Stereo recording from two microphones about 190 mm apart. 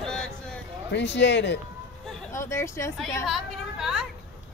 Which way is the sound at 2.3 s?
15° left (ahead or behind).